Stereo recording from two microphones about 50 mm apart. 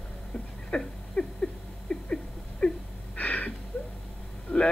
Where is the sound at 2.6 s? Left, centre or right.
Left.